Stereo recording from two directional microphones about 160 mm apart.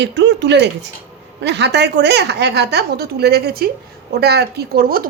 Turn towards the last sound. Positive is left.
turn(degrees=-70)  # may be behind; listen again after turning